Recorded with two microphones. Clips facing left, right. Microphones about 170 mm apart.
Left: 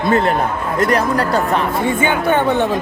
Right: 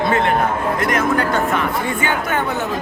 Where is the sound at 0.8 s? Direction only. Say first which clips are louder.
Left 5 dB; 35° left (ahead or behind).